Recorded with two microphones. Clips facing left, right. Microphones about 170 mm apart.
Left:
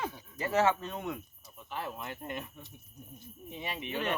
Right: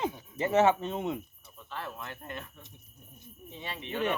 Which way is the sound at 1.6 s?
15° left (ahead or behind).